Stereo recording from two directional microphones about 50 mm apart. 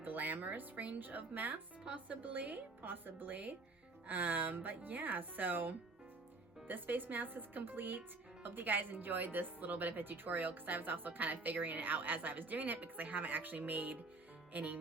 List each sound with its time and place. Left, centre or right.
0.0 s speech: right